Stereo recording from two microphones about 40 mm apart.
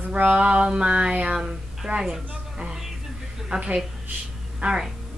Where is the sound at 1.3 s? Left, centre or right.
Centre.